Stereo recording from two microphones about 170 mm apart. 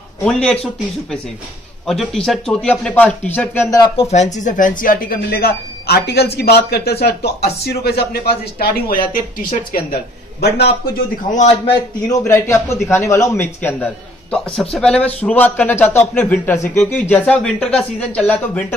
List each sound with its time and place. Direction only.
0.2 s speech: 5° left (ahead or behind)
1.9 s speech: centre (ahead or behind)
4.1 s speech: 45° left (ahead or behind)
11.3 s a man's voice: 40° left (ahead or behind)
12.1 s a man's voice: 15° left (ahead or behind)